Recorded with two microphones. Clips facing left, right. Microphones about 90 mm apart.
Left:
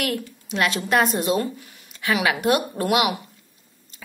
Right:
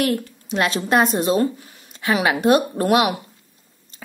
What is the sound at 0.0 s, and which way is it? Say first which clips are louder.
Speech: right 5 dB; 35° right (ahead or behind).